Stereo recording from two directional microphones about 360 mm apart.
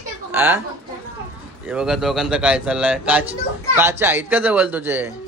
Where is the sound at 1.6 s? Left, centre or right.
Centre.